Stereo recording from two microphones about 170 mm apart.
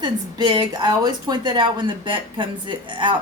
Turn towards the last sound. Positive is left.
turn(degrees=-30)  # may be behind; listen again after turning